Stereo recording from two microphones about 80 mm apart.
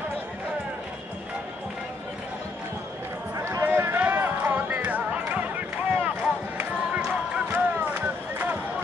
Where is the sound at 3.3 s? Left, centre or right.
Right.